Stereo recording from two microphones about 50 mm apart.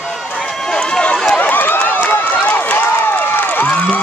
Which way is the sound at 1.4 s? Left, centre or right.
Left.